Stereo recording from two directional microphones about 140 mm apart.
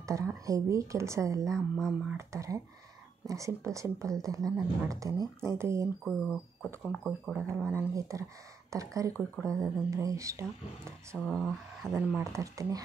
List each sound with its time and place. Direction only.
0.0 s speech: 20° right (ahead or behind)
1.8 s speech: centre (ahead or behind)
2.1 s speech: 20° right (ahead or behind)
6.0 s speech: 5° left (ahead or behind)
7.3 s speech: 15° right (ahead or behind)
11.2 s speech: 5° left (ahead or behind)
11.9 s speech: 10° right (ahead or behind)
12.2 s speech: 20° right (ahead or behind)